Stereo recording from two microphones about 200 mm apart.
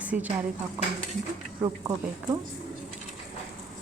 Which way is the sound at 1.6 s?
20° right (ahead or behind).